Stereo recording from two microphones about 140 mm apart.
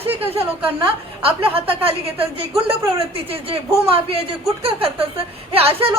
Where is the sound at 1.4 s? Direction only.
40° right (ahead or behind).